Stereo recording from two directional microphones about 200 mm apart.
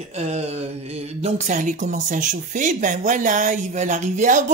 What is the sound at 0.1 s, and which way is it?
Speech, 35° right (ahead or behind).